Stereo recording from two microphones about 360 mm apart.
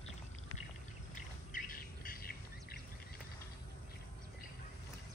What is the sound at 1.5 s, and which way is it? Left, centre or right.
Bird, left.